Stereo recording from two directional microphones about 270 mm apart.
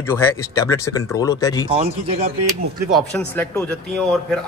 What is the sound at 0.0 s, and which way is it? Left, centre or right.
Speech, centre.